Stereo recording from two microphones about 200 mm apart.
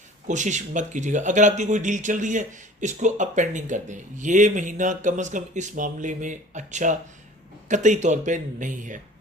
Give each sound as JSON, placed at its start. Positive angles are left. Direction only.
{"t": 0.3, "sound": "speech", "side_deg": -40}